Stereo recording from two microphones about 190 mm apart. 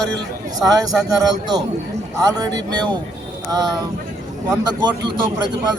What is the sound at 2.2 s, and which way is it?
Speech, 20° right (ahead or behind).